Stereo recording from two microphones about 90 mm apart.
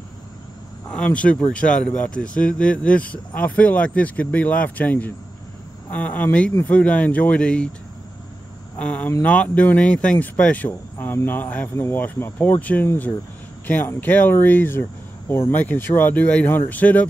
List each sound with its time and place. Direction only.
0.8 s speech: 15° left (ahead or behind)
8.7 s speech: 15° left (ahead or behind)